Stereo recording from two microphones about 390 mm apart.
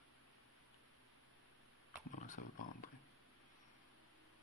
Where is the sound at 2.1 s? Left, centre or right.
Centre.